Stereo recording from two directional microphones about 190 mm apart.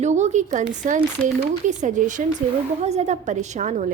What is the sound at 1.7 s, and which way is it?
A woman's voice, 40° right (ahead or behind).